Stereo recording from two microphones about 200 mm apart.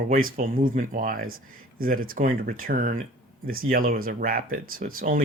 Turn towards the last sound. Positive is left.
turn(degrees=-45)  # may be behind; listen again after turning